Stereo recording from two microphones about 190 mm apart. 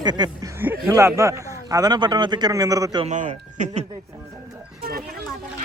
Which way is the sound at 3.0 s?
40° right (ahead or behind).